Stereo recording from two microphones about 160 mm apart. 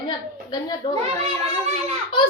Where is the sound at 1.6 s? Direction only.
40° right (ahead or behind).